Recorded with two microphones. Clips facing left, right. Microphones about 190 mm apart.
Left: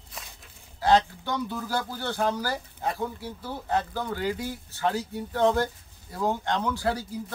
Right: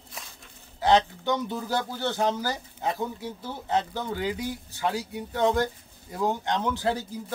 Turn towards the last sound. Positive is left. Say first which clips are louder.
# right 1 dB
turn(degrees=-20)  # may be behind; listen again after turning